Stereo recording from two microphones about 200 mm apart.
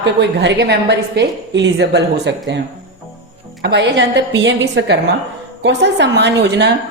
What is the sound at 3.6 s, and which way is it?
A woman's voice, 60° right (ahead or behind).